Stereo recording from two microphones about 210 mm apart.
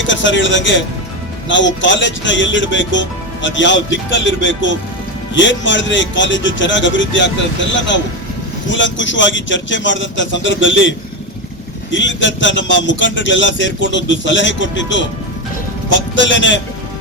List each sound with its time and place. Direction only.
0.1 s speech: 60° left (ahead or behind)